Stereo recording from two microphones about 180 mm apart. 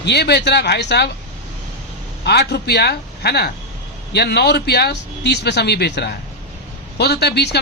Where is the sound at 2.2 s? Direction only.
65° left (ahead or behind).